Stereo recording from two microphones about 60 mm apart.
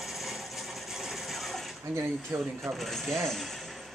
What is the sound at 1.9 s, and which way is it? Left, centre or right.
Speech, right.